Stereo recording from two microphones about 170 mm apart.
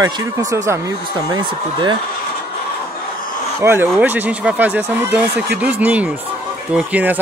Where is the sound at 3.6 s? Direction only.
10° right (ahead or behind).